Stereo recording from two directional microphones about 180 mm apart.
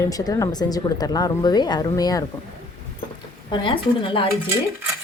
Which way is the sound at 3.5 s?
25° left (ahead or behind).